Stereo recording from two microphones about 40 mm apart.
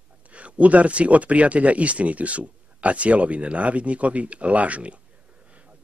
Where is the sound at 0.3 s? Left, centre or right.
Right.